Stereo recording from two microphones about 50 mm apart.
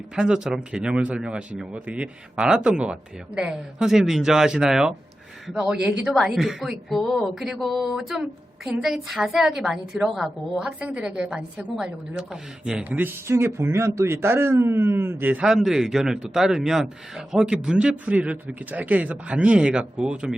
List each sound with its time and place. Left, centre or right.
0.2 s a woman's voice: centre
6.1 s speech: centre
7.3 s speech: centre
10.8 s a woman's voice: right
12.8 s speech: right
13.2 s speech: right
15.4 s speech: centre
18.0 s a woman's voice: right